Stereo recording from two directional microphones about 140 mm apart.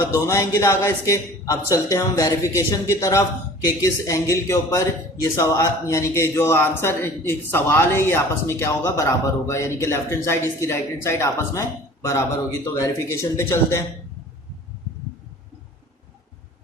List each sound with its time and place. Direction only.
0.0 s a man's voice: 20° left (ahead or behind)
12.6 s a man's voice: 25° left (ahead or behind)